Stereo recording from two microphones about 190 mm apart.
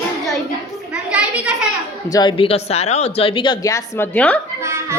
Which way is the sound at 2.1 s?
25° left (ahead or behind).